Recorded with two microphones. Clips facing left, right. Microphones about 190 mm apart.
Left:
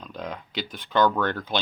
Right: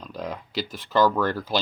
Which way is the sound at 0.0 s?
5° right (ahead or behind).